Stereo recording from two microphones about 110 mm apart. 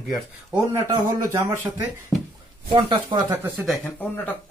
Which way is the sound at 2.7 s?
45° right (ahead or behind).